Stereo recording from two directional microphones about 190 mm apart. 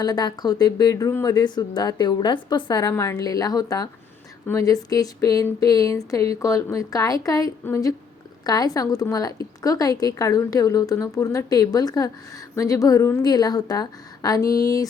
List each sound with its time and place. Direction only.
0.0 s a woman's voice: 20° left (ahead or behind)